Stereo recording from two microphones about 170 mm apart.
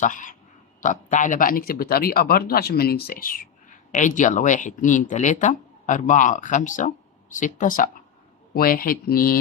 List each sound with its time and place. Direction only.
0.0 s speech: 50° left (ahead or behind)